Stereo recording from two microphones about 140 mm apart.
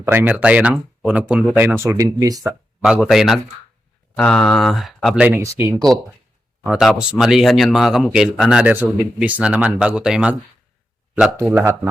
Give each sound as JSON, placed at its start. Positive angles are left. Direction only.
{"t": 0.0, "sound": "speech", "side_deg": -15}
{"t": 2.8, "sound": "speech", "side_deg": -5}
{"t": 5.5, "sound": "speech", "side_deg": -15}
{"t": 6.7, "sound": "speech", "side_deg": -5}
{"t": 11.3, "sound": "a man's voice", "side_deg": -20}